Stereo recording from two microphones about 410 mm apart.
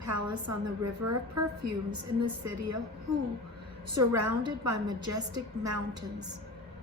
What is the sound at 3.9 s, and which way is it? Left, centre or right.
A woman's voice, right.